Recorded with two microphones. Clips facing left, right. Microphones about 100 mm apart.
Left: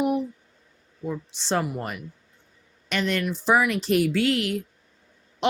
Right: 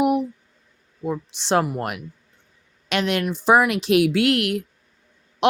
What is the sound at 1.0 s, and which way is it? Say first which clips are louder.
Speech: right 4 dB; 60° right (ahead or behind).